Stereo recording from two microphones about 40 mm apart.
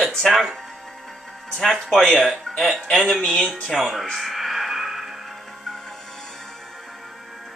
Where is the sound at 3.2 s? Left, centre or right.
Centre.